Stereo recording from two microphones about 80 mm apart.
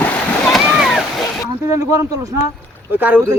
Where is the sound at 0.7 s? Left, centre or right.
Centre.